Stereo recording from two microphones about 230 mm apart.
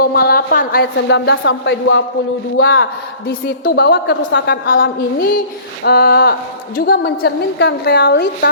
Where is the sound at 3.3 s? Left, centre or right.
Left.